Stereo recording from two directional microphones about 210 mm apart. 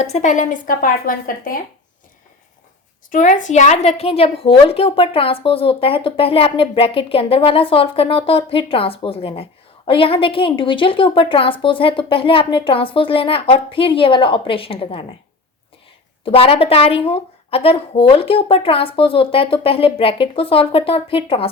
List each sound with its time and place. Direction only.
0.0 s a woman's voice: 35° left (ahead or behind)
3.1 s a woman's voice: 35° left (ahead or behind)
16.2 s a woman's voice: 25° left (ahead or behind)